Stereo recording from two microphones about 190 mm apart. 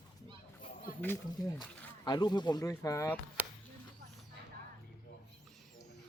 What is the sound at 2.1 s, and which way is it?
Speech, 20° left (ahead or behind).